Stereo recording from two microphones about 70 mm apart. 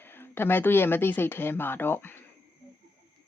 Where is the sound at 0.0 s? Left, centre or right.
Left.